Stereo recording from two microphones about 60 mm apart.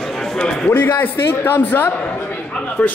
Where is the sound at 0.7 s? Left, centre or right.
Left.